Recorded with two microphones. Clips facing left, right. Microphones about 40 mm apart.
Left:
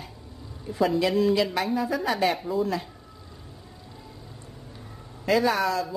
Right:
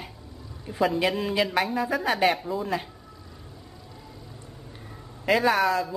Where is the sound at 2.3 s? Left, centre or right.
Centre.